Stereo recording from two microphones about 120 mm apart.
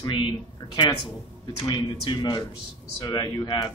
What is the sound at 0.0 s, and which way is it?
Speech, 35° left (ahead or behind).